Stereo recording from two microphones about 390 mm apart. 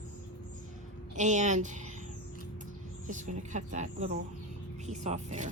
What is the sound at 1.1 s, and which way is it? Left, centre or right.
Speech, centre.